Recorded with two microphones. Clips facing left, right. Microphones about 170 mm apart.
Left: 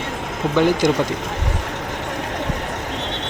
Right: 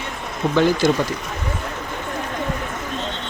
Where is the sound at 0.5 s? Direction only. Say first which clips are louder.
Left 1 dB; 15° left (ahead or behind).